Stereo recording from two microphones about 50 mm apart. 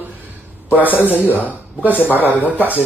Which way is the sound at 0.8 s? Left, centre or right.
Left.